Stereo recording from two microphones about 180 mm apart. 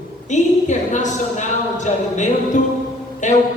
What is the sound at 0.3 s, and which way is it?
A woman's voice, 40° left (ahead or behind).